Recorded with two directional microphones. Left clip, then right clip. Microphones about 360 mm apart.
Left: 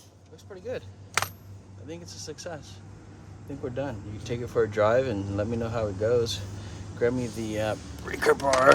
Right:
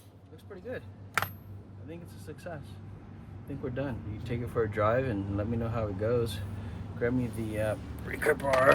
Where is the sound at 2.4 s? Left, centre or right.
Centre.